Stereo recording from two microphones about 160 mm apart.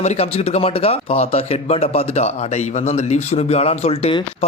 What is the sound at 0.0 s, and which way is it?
Speech, 40° left (ahead or behind).